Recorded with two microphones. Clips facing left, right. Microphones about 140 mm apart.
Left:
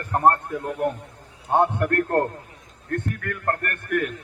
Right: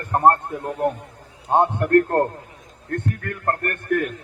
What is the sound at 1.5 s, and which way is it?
A man's voice, 25° right (ahead or behind).